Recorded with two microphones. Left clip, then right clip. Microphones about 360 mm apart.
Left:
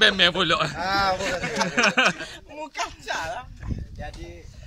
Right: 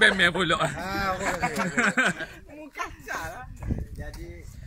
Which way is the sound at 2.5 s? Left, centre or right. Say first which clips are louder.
Left 5 dB; left.